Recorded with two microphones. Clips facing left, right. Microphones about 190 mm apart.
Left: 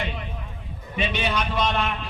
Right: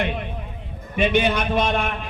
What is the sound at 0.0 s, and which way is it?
A man's voice, 55° right (ahead or behind).